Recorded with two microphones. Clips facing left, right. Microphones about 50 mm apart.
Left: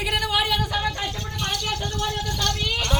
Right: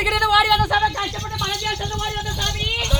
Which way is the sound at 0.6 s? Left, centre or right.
Right.